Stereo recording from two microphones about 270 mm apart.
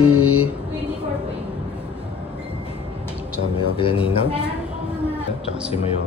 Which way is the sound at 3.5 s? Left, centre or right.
Centre.